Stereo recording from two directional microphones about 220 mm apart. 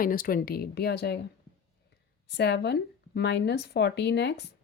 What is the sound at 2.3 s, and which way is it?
Speech, 50° left (ahead or behind).